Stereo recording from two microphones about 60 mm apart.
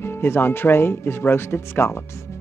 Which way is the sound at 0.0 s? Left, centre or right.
Left.